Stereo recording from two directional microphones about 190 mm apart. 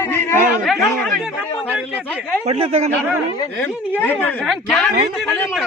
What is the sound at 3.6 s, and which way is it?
A man's voice, 10° left (ahead or behind).